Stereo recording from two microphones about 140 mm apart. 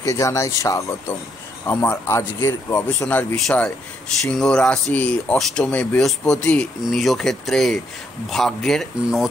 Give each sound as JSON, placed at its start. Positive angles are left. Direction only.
{"t": 0.0, "sound": "speech", "side_deg": 25}